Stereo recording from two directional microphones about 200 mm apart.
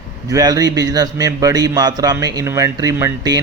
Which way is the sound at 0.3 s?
20° right (ahead or behind).